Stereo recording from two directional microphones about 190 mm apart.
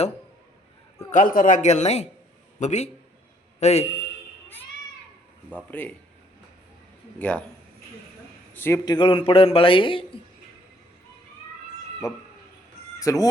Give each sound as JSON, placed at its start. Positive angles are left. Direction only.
{"t": 1.1, "sound": "a man's voice", "side_deg": 45}
{"t": 5.7, "sound": "a man's voice", "side_deg": 10}
{"t": 7.2, "sound": "a man's voice", "side_deg": 5}
{"t": 8.5, "sound": "a man's voice", "side_deg": 15}
{"t": 12.0, "sound": "a man's voice", "side_deg": 15}